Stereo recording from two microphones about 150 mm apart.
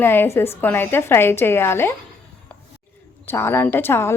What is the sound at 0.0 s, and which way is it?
A woman's voice, 15° left (ahead or behind).